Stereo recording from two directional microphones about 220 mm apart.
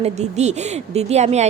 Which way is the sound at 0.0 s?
30° right (ahead or behind).